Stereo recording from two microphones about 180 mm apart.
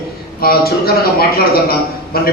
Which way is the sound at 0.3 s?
55° left (ahead or behind).